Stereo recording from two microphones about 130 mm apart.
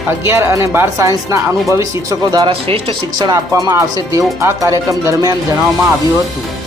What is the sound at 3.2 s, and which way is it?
Speech, 25° right (ahead or behind).